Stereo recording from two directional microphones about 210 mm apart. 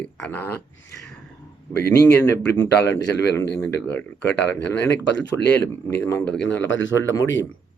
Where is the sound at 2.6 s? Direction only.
55° left (ahead or behind).